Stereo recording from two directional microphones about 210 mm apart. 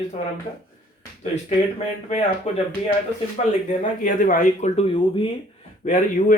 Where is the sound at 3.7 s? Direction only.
40° left (ahead or behind).